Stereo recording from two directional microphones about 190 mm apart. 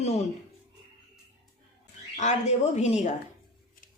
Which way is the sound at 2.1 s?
40° left (ahead or behind).